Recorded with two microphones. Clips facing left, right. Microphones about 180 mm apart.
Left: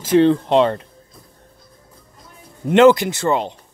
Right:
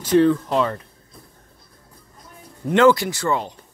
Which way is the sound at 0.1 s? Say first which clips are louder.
Left 3 dB; 25° left (ahead or behind).